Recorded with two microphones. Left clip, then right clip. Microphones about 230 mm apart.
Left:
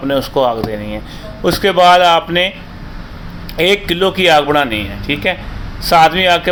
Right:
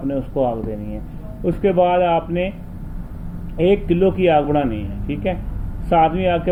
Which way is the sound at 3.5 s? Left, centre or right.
Left.